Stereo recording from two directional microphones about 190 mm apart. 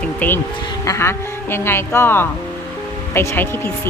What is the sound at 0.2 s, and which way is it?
Speech, 10° left (ahead or behind).